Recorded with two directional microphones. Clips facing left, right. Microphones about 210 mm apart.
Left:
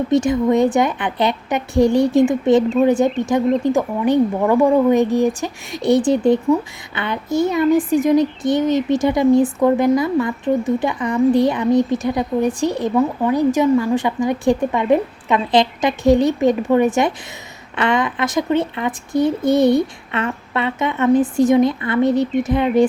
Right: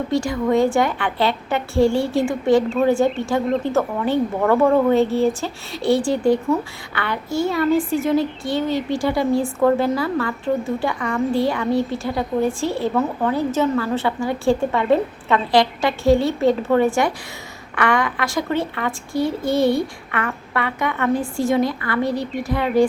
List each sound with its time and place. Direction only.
0.1 s speech: 20° left (ahead or behind)